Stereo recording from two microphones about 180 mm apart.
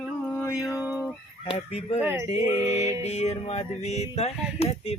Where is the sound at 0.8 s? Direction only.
5° right (ahead or behind).